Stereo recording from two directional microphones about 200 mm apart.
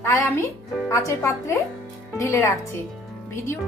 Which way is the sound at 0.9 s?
15° left (ahead or behind).